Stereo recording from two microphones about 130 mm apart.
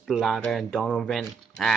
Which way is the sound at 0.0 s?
Centre (ahead or behind).